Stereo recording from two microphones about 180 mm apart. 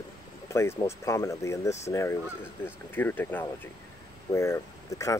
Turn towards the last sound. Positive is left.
turn(degrees=20)  # may be behind; listen again after turning